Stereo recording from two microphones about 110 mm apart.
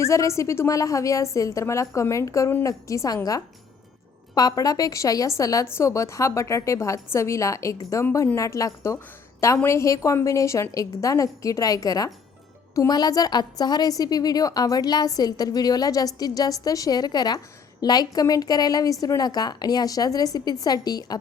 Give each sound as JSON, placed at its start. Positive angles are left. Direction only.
{"t": 0.0, "sound": "a woman's voice", "side_deg": 30}
{"t": 4.4, "sound": "a woman's voice", "side_deg": 35}